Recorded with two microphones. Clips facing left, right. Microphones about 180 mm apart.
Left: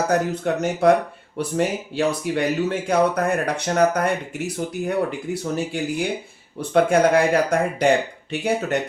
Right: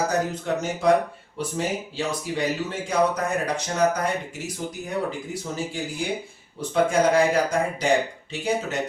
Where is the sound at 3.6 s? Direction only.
60° left (ahead or behind).